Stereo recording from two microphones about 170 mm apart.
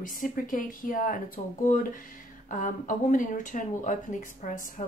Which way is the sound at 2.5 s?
50° left (ahead or behind).